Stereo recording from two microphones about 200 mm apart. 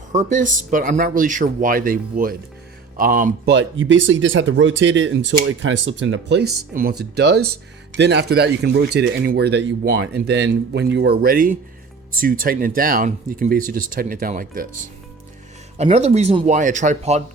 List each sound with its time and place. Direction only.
0.1 s speech: 40° right (ahead or behind)
3.5 s speech: 65° right (ahead or behind); by 14.7 s 45° right (ahead or behind)
15.8 s speech: 35° right (ahead or behind)